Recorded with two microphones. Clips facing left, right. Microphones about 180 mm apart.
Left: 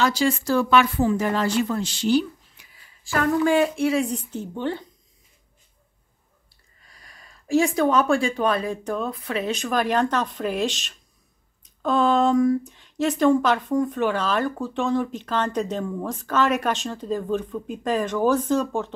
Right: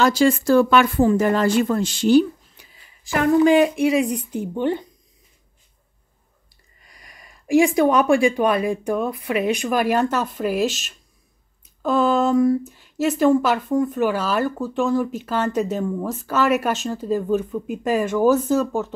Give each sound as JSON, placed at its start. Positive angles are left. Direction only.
{"t": 0.0, "sound": "speech", "side_deg": -50}
{"t": 2.5, "sound": "a sound", "side_deg": -30}
{"t": 3.0, "sound": "speech", "side_deg": -20}
{"t": 6.8, "sound": "speech", "side_deg": -15}